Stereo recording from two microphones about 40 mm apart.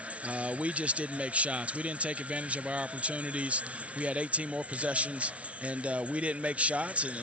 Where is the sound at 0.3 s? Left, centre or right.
Right.